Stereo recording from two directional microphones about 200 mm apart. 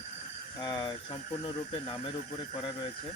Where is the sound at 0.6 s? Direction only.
25° left (ahead or behind).